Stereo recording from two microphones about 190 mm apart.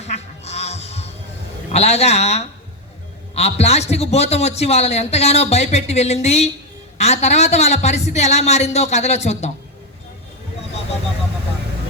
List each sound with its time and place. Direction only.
0.0 s music: 35° left (ahead or behind)
1.7 s a man's voice: 35° left (ahead or behind)